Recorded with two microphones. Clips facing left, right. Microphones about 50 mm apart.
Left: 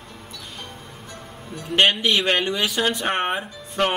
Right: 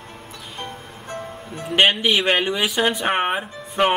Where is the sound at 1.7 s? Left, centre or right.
Centre.